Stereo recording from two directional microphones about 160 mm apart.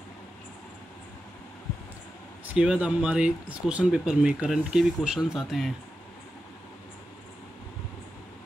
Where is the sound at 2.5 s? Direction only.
5° right (ahead or behind).